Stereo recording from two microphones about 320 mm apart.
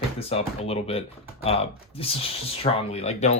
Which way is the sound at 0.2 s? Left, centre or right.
Centre.